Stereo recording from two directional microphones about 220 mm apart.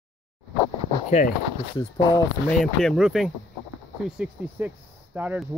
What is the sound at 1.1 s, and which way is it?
Speech, 30° left (ahead or behind).